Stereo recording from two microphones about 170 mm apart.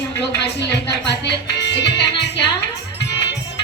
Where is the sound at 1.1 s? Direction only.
85° left.